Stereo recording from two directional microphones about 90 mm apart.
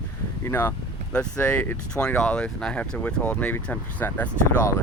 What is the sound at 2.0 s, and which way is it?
Speech, 10° left (ahead or behind).